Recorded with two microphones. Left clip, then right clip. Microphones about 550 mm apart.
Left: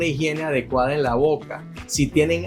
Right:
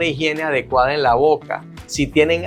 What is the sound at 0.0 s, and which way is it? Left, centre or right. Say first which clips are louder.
Speech: right 4 dB; right.